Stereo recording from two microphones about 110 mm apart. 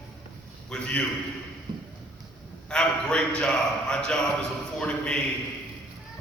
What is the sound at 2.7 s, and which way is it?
A man's voice, 10° left (ahead or behind).